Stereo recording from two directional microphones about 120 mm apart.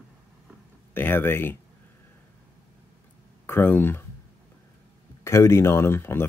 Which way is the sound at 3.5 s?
20° left (ahead or behind).